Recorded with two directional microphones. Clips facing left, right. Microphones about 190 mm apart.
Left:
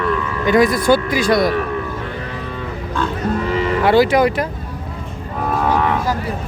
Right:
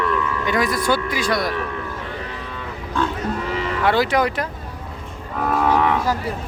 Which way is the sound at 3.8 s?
5° left (ahead or behind).